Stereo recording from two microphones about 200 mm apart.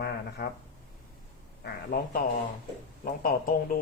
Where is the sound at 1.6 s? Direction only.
50° left (ahead or behind).